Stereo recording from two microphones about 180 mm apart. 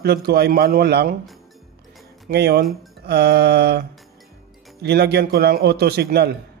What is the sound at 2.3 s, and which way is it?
A man's voice, 65° right (ahead or behind).